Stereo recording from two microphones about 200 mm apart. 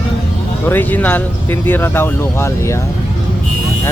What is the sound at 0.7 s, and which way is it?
Speech, 10° left (ahead or behind).